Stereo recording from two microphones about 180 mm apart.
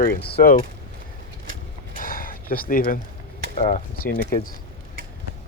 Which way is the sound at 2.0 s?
50° left (ahead or behind).